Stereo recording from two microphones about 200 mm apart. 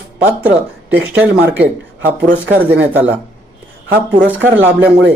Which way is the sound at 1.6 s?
30° right (ahead or behind).